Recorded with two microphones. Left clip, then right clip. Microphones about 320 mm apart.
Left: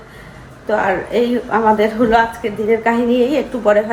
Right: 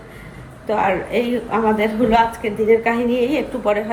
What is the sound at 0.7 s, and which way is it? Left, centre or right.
A woman's voice, centre.